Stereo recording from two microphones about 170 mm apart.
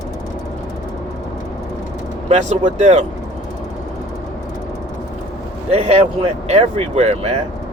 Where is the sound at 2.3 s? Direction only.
40° right (ahead or behind).